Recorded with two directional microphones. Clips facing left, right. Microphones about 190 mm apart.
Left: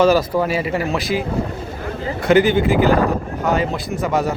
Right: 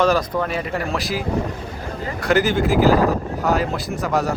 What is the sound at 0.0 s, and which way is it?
Speech, 5° left (ahead or behind).